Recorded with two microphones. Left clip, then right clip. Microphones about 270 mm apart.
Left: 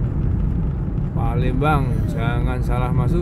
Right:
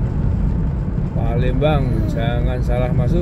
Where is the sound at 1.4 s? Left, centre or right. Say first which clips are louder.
Right 2 dB; centre.